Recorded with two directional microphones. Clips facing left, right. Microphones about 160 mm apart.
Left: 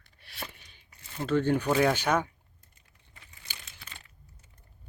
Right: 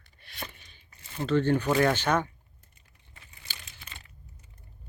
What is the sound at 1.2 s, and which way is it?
Speech, 5° left (ahead or behind).